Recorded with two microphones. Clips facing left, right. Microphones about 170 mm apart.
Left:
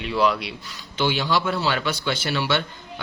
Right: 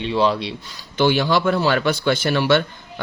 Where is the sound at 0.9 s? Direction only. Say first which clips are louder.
Right 5 dB; 55° right (ahead or behind).